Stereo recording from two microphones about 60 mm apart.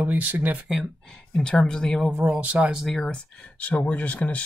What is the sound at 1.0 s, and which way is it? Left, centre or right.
Speech, centre.